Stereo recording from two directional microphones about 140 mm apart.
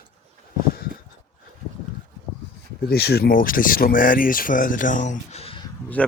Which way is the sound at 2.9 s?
90° left.